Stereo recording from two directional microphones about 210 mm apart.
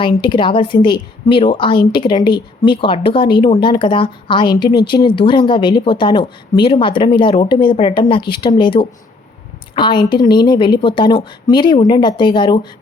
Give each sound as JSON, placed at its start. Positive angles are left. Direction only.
{"t": 0.0, "sound": "speech", "side_deg": 20}